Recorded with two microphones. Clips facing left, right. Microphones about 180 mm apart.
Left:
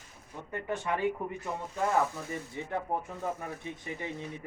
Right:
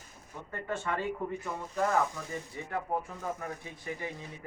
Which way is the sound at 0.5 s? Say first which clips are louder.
Left 1 dB; 15° left (ahead or behind).